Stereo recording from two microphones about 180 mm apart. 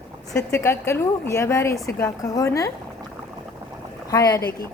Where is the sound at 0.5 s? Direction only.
15° left (ahead or behind).